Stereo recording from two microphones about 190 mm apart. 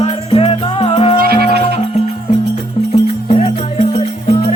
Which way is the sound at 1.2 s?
55° right (ahead or behind).